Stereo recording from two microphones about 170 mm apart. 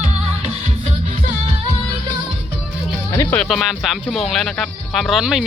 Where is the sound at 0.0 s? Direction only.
40° right (ahead or behind).